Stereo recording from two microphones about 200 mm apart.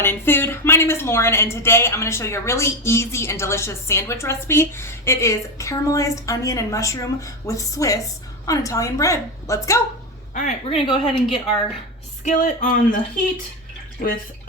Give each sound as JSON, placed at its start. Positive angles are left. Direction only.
{"t": 0.0, "sound": "speech", "side_deg": 10}
{"t": 10.3, "sound": "speech", "side_deg": 35}
{"t": 12.2, "sound": "speech", "side_deg": 40}